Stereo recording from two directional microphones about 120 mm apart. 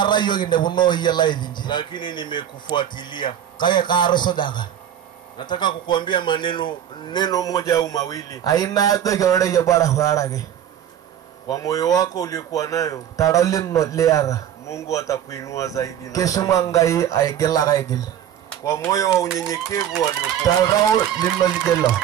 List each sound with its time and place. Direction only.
0.0 s a man's voice: 40° left (ahead or behind)
11.4 s speech: 30° left (ahead or behind)